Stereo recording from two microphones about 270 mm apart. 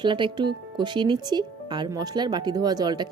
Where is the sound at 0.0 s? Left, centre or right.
Centre.